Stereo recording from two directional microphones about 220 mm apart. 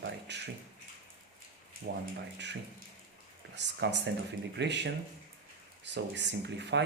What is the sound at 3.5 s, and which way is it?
Speech, 50° right (ahead or behind).